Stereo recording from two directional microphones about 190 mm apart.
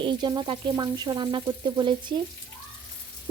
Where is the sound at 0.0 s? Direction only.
25° right (ahead or behind).